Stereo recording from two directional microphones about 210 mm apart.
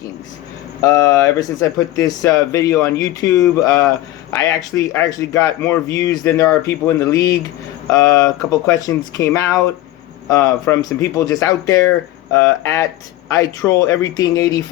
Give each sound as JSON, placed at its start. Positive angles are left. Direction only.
{"t": 0.8, "sound": "speech", "side_deg": 15}